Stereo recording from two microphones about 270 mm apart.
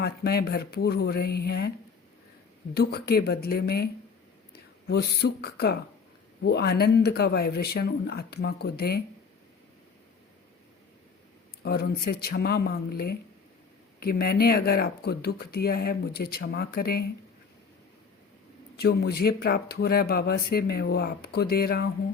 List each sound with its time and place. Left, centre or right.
0.0 s speech: left
2.7 s speech: left
11.6 s speech: left
18.8 s speech: left